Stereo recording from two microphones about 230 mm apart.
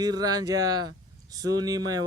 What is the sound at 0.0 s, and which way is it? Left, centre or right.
Speech, centre.